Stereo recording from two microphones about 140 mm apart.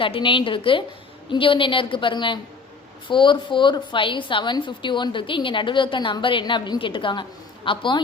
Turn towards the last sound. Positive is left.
turn(degrees=35)  # may be behind; listen again after turning